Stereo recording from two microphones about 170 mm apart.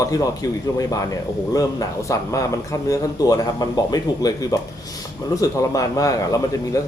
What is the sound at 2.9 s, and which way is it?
Speech, 20° left (ahead or behind).